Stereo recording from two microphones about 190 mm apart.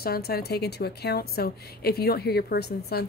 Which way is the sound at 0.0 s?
55° left (ahead or behind).